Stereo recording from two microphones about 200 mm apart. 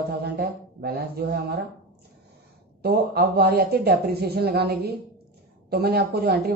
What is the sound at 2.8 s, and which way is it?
A woman's voice, 50° right (ahead or behind).